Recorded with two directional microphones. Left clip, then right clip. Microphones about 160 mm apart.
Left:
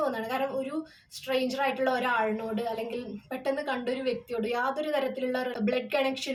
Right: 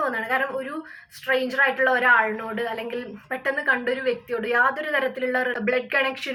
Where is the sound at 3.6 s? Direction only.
35° left (ahead or behind).